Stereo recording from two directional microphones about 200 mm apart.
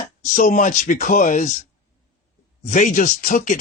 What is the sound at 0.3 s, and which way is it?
Speech, 40° left (ahead or behind).